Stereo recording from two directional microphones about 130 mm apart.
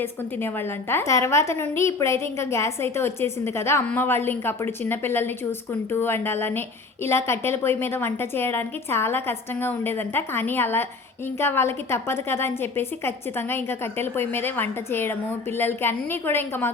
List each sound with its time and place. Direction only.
0.0 s a woman's voice: 15° left (ahead or behind)